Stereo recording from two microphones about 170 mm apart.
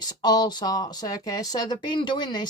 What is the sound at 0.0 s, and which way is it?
Speech, 25° left (ahead or behind).